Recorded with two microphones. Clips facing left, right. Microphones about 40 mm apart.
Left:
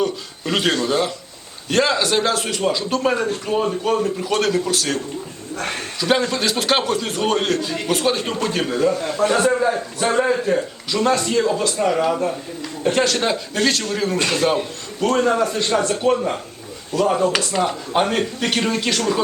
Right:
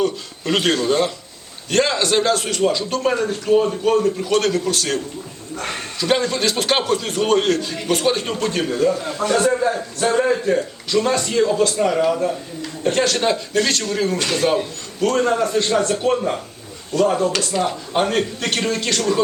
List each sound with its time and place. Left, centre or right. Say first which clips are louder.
0.0 s a man's voice: right 1 dB; centre
6.0 s a man's voice: even; centre
8.9 s a man's voice: left 1 dB; left; by 17.2 s centre
17.2 s speech: left 1 dB; centre
17.7 s speech: even; centre